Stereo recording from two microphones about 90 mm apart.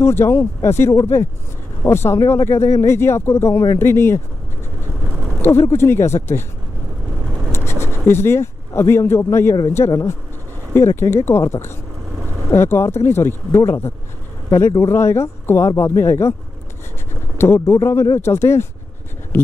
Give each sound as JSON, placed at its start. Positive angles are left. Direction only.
{"t": 0.0, "sound": "speech", "side_deg": 30}
{"t": 5.4, "sound": "speech", "side_deg": 25}
{"t": 7.5, "sound": "speech", "side_deg": 30}
{"t": 17.6, "sound": "speech", "side_deg": 35}